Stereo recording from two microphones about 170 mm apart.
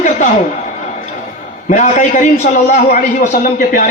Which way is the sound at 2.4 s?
55° left (ahead or behind).